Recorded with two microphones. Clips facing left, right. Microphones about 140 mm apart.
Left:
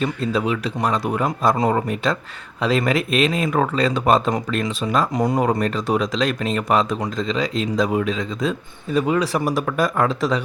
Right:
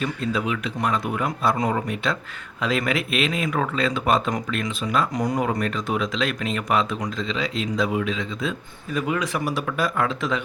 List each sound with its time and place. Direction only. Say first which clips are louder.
0.0 s speech: left 4 dB; 35° left (ahead or behind)
5.1 s speech: left 4 dB; 25° left (ahead or behind)
5.4 s speech: left 4 dB; 35° left (ahead or behind)